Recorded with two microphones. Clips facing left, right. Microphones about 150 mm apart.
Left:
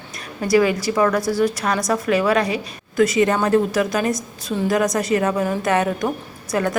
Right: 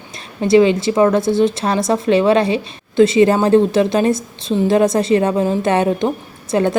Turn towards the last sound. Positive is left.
turn(degrees=-25)  # may be behind; listen again after turning